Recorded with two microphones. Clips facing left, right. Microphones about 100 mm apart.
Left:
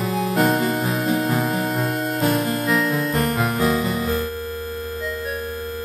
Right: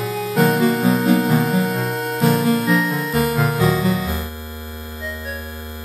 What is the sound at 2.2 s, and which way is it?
Music, 90° right.